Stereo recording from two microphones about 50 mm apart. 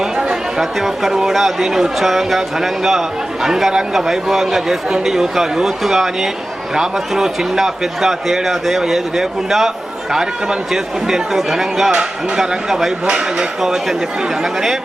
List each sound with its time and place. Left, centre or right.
0.0 s a man's voice: centre
13.1 s speech: centre
13.6 s speech: centre